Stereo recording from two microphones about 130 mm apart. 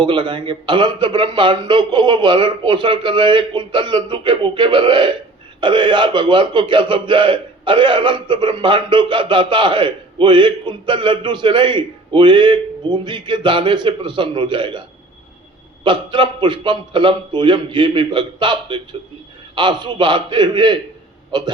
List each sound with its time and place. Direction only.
0.0 s a man's voice: 40° right (ahead or behind)